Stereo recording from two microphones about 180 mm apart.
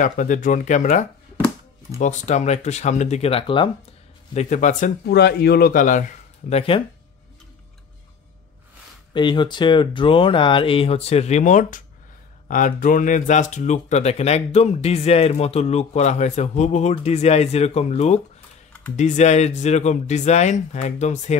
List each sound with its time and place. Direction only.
0.0 s speech: 45° left (ahead or behind); by 3.7 s 30° left (ahead or behind)
4.3 s speech: 40° left (ahead or behind)
5.0 s speech: 65° left (ahead or behind); by 6.0 s 45° left (ahead or behind)
6.5 s speech: 30° left (ahead or behind)
9.1 s speech: 25° left (ahead or behind)